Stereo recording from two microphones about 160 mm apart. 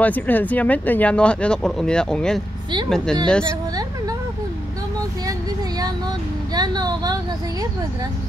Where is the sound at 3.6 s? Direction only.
25° right (ahead or behind).